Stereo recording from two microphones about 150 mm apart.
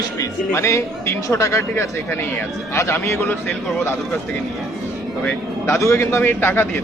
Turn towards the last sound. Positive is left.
turn(degrees=15)  # may be behind; listen again after turning